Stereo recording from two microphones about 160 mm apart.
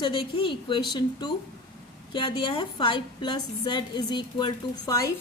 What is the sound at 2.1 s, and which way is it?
A woman's voice, 30° left (ahead or behind).